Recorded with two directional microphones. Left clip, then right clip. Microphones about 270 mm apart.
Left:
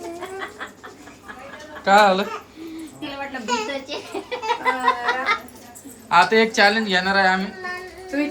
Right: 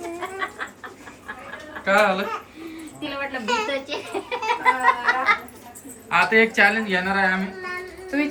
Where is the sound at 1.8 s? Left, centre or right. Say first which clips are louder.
Left 4 dB; centre.